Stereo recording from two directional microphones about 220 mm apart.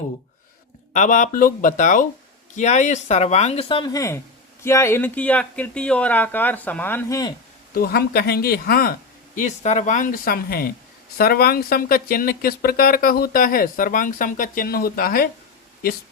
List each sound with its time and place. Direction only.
0.9 s speech: 35° left (ahead or behind); by 7.3 s 15° left (ahead or behind)
7.7 s speech: 45° left (ahead or behind)